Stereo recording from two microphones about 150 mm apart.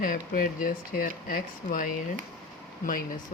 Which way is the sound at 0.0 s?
70° left (ahead or behind).